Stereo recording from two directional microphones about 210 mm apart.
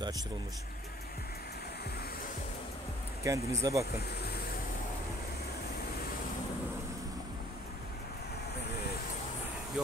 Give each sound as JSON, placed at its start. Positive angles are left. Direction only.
{"t": 3.3, "sound": "speech", "side_deg": -15}
{"t": 3.9, "sound": "speech", "side_deg": 50}